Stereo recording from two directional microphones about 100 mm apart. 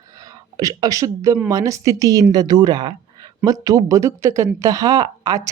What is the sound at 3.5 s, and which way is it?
Speech, 35° right (ahead or behind).